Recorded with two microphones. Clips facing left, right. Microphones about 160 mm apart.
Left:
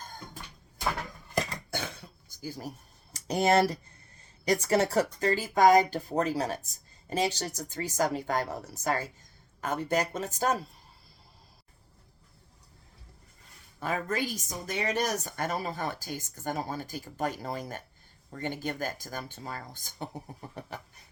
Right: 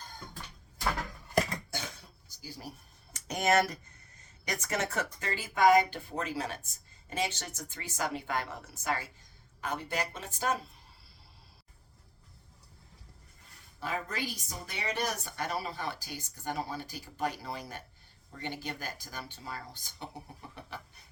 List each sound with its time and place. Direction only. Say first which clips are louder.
1.7 s cough: left 7 dB; 55° left (ahead or behind)
2.4 s a woman's voice: left 6 dB; 45° left (ahead or behind)
13.7 s a woman's voice: left 5 dB; 50° left (ahead or behind)